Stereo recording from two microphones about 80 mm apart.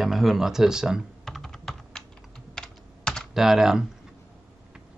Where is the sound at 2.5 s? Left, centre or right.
Centre.